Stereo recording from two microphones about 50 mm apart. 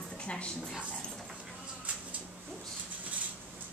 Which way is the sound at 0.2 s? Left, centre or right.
Left.